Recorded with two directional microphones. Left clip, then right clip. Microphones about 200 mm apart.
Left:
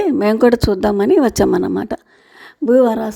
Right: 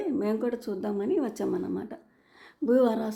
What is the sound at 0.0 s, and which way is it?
Speech, 50° left (ahead or behind).